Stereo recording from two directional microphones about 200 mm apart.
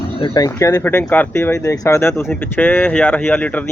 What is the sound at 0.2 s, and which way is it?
Speech, 20° left (ahead or behind).